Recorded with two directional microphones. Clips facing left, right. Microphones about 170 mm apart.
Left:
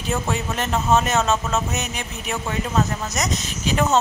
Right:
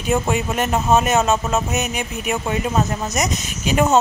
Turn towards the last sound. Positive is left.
turn(degrees=-15)  # may be behind; listen again after turning